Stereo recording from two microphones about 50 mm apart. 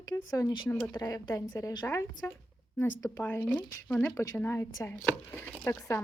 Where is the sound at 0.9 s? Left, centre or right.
Left.